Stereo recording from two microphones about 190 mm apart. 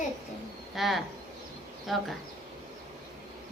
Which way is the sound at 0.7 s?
Centre (ahead or behind).